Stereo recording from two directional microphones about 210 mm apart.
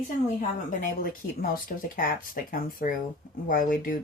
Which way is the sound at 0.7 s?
40° left (ahead or behind).